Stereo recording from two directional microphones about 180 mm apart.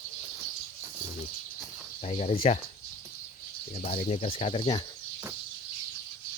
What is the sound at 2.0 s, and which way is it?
Speech, 40° left (ahead or behind).